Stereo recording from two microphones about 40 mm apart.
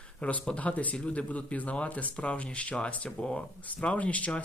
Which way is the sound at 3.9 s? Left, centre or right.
Left.